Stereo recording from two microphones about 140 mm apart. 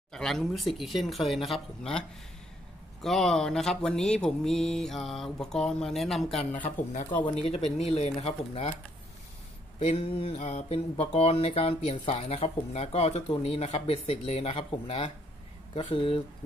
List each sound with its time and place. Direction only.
0.1 s speech: centre (ahead or behind)
6.5 s speech: 65° left (ahead or behind)
7.3 s speech: 50° left (ahead or behind)
9.8 s speech: 45° left (ahead or behind)